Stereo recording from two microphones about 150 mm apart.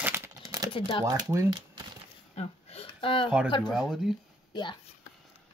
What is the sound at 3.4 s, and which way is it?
Speech, 35° left (ahead or behind).